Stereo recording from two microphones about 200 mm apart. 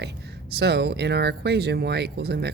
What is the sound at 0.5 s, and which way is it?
Speech, 55° right (ahead or behind).